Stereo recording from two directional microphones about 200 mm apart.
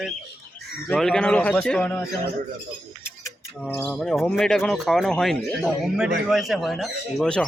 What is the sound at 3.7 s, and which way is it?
Speech, 5° left (ahead or behind).